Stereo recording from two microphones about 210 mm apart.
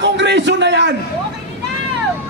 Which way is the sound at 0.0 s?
55° right (ahead or behind).